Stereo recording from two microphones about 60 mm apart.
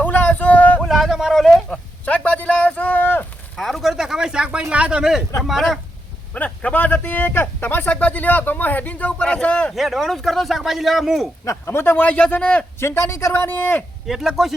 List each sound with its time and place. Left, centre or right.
0.0 s a sound: left
0.9 s a sound: centre
2.0 s a sound: left
3.5 s a sound: centre
4.7 s speech: centre
5.4 s speech: centre
6.3 s a man's voice: left
9.7 s speech: centre
11.4 s speech: left
12.0 s a man's voice: left
12.8 s speech: left
14.1 s speech: centre